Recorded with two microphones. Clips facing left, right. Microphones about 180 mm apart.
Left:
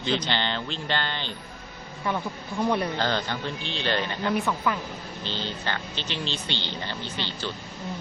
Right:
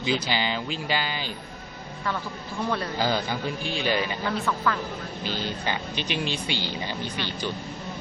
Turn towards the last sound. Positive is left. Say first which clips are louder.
# right 2 dB
turn(degrees=-15)  # may be behind; listen again after turning